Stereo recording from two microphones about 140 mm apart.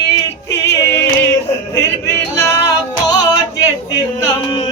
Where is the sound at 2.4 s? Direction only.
20° left (ahead or behind).